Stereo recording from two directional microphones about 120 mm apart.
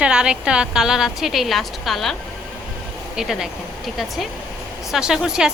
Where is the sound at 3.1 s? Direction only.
5° right (ahead or behind).